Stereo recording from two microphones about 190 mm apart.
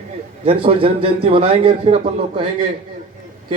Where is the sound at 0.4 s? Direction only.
30° right (ahead or behind).